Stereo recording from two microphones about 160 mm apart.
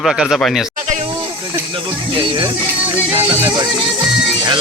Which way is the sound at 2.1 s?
30° right (ahead or behind).